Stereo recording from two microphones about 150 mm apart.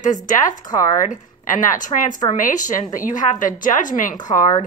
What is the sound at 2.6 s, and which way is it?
A woman's voice, 60° left (ahead or behind).